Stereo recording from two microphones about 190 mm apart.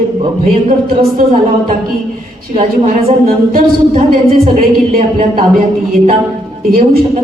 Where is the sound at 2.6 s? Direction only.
50° right (ahead or behind).